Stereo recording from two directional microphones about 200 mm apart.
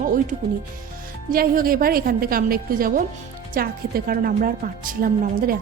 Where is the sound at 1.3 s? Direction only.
45° right (ahead or behind).